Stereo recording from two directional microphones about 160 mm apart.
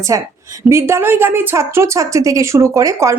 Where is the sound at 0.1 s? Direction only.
20° right (ahead or behind).